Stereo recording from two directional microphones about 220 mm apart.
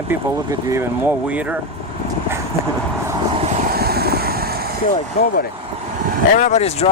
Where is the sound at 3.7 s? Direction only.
45° right (ahead or behind).